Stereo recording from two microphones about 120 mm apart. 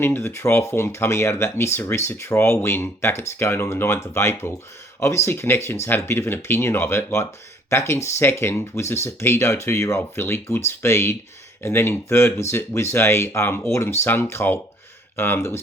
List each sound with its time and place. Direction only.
0.0 s speech: 15° left (ahead or behind)